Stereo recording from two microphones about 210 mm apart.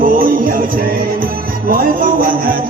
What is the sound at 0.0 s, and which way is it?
Music, 40° right (ahead or behind).